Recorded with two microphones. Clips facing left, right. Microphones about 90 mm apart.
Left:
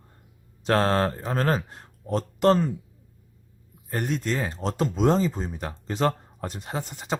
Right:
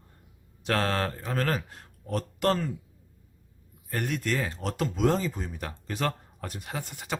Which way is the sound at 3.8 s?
25° left (ahead or behind).